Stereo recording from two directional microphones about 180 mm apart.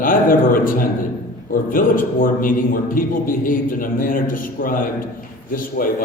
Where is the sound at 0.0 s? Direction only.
50° left (ahead or behind).